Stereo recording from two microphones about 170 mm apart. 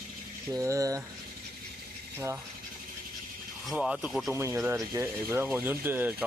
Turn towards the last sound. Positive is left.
turn(degrees=-10)  # may be behind; listen again after turning